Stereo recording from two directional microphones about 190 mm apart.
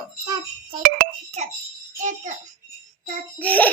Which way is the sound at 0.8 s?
45° right (ahead or behind).